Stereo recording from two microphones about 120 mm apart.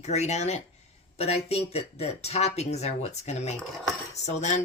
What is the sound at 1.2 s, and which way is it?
Speech, 60° left (ahead or behind).